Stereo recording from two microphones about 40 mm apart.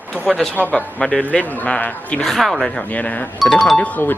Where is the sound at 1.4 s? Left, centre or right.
Left.